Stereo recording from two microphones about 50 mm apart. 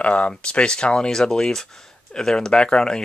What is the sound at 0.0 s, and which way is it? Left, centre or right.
Speech, left.